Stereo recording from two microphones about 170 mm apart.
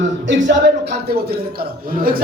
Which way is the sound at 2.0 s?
55° right (ahead or behind).